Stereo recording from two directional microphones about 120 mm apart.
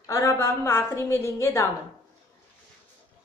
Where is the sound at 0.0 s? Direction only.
25° left (ahead or behind).